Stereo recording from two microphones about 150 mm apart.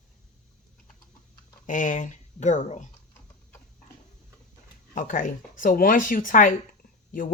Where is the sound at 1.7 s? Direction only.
60° left (ahead or behind).